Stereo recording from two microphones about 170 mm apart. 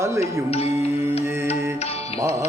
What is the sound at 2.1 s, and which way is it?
Speech, 15° right (ahead or behind).